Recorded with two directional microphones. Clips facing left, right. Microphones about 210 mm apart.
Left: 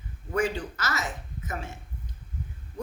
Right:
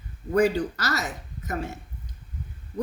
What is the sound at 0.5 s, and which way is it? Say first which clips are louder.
Speech: right 5 dB; 40° right (ahead or behind).